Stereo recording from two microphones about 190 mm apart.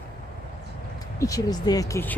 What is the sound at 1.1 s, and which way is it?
Speech, 15° left (ahead or behind).